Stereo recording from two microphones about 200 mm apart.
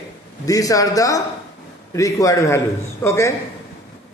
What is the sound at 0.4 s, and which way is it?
Speech, 15° left (ahead or behind).